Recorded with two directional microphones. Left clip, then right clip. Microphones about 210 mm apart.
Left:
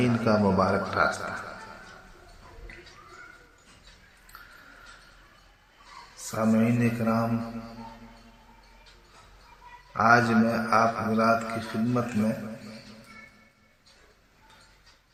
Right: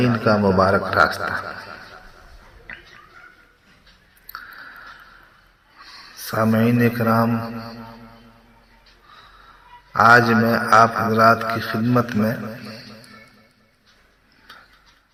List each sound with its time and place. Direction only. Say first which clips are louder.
0.0 s a man's voice: right 6 dB; 15° right (ahead or behind)
6.3 s a man's voice: right 7 dB; 30° right (ahead or behind)
9.9 s a man's voice: right 8 dB; 30° right (ahead or behind)